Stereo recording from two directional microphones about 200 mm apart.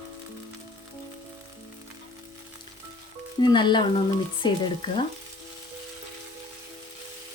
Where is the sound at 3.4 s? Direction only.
25° left (ahead or behind).